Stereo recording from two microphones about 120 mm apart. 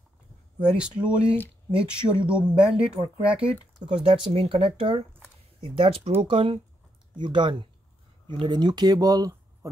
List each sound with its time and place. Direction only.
0.7 s speech: 10° right (ahead or behind)
3.9 s speech: 55° right (ahead or behind); by 9.7 s 30° right (ahead or behind)